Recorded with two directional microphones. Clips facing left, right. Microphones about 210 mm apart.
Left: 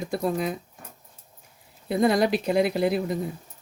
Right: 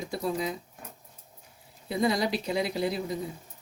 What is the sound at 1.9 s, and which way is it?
Speech, 55° left (ahead or behind).